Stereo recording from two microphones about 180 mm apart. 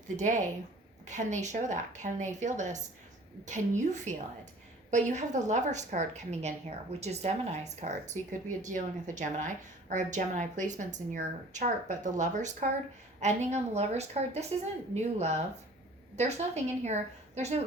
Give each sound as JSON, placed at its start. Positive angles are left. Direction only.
{"t": 0.2, "sound": "a woman's voice", "side_deg": -45}
{"t": 16.8, "sound": "a woman's voice", "side_deg": -40}